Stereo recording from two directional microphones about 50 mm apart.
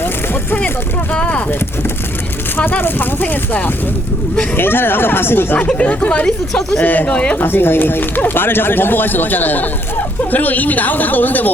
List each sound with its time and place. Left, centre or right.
1.1 s speech: left
2.6 s speech: left
4.5 s speech: left
5.7 s speech: left
6.2 s speech: centre
6.8 s speech: left
7.1 s speech: left
7.3 s speech: left